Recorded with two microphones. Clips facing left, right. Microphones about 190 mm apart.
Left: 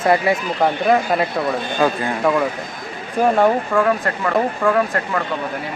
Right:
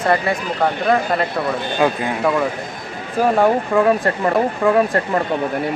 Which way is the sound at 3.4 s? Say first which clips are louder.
Right 1 dB; 20° right (ahead or behind).